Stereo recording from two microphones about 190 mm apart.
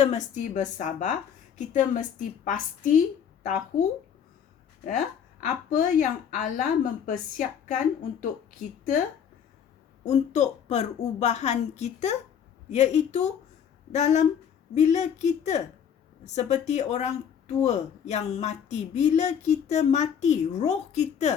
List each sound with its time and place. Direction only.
0.0 s speech: 40° left (ahead or behind)
5.8 s a woman's voice: 40° left (ahead or behind)
10.0 s speech: 35° left (ahead or behind)